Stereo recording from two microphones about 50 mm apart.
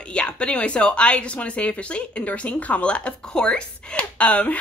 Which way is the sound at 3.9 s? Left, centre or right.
Left.